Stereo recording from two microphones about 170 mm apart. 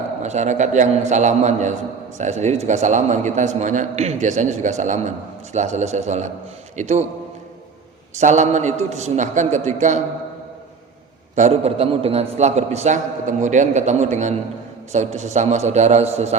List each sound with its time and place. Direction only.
0.2 s a man's voice: 45° right (ahead or behind)
8.2 s a man's voice: 45° right (ahead or behind)
11.3 s a man's voice: 40° right (ahead or behind)